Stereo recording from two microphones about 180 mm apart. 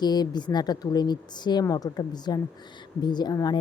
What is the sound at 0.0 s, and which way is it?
A woman's voice, 25° left (ahead or behind).